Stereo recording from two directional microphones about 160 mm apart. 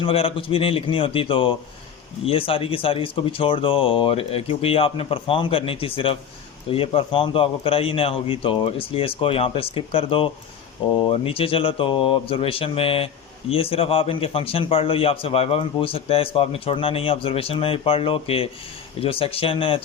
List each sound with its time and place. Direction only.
0.0 s a man's voice: 35° left (ahead or behind)